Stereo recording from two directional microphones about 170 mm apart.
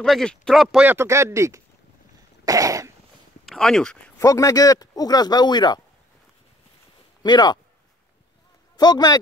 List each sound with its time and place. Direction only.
0.0 s speech: 5° left (ahead or behind)
0.8 s speech: 15° right (ahead or behind)
2.4 s cough: 20° right (ahead or behind)
3.4 s speech: 5° left (ahead or behind)
4.2 s speech: 20° left (ahead or behind)
7.2 s speech: 25° left (ahead or behind)
8.7 s speech: 25° left (ahead or behind)